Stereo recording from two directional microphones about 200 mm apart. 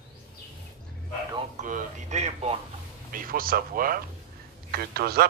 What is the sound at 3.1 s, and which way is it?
Speech, 45° right (ahead or behind).